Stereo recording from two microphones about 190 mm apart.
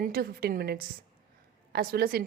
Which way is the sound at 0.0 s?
50° right (ahead or behind).